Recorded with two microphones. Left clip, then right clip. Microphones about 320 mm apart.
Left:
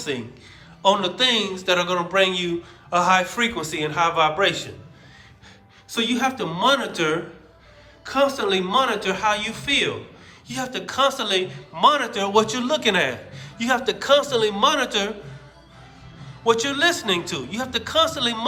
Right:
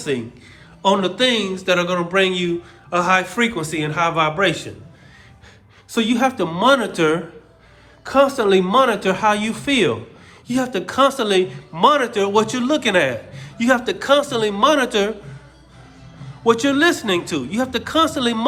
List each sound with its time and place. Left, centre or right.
0.8 s a man's voice: centre
5.9 s a man's voice: centre
16.4 s a man's voice: centre